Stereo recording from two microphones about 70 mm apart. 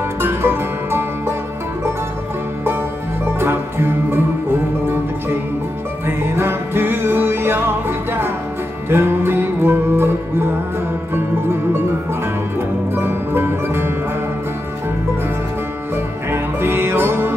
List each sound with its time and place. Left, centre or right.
0.2 s music: right
3.3 s music: right
12.9 s music: right
16.3 s music: right